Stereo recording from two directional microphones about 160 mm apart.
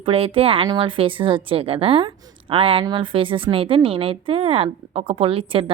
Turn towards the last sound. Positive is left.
turn(degrees=-35)  # may be behind; listen again after turning